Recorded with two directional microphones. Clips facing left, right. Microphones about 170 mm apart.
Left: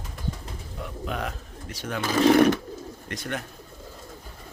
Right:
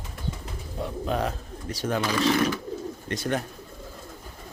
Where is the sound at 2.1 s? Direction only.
50° left (ahead or behind).